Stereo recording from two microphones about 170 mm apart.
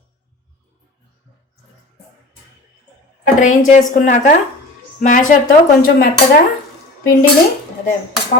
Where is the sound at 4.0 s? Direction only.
50° left (ahead or behind).